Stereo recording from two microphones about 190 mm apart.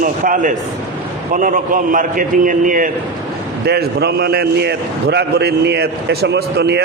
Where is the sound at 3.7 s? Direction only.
55° right (ahead or behind).